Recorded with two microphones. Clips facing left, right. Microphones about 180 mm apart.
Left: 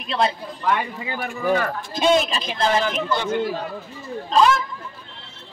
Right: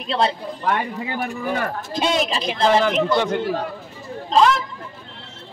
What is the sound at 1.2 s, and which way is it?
Speech, 45° right (ahead or behind).